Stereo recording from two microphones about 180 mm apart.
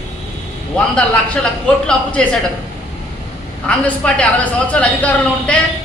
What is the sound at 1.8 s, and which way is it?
Speech, 5° left (ahead or behind).